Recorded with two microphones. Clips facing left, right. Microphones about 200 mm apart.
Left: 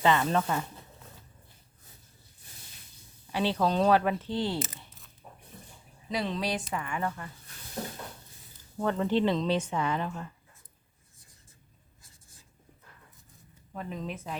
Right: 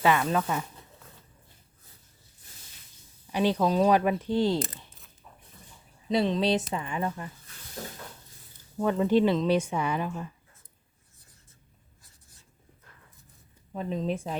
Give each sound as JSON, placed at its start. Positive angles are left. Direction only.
{"t": 0.0, "sound": "a woman's voice", "side_deg": -10}
{"t": 3.3, "sound": "a woman's voice", "side_deg": -15}
{"t": 6.1, "sound": "speech", "side_deg": -25}
{"t": 8.8, "sound": "a woman's voice", "side_deg": -15}
{"t": 13.7, "sound": "speech", "side_deg": -25}